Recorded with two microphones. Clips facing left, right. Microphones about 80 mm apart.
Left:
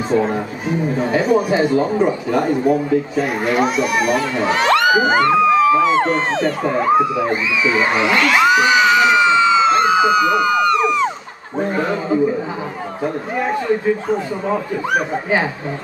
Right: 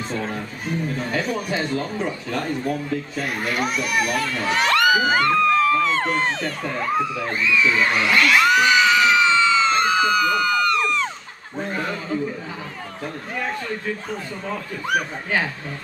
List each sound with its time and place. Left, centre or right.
0.1 s speech: centre
4.5 s crowd: left
5.1 s speech: centre
6.3 s speech: left
11.6 s speech: left